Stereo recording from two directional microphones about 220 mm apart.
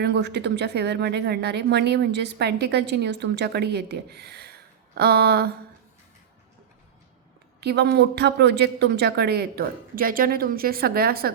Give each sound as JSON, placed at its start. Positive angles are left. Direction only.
{"t": 0.0, "sound": "speech", "side_deg": -50}
{"t": 7.6, "sound": "speech", "side_deg": -50}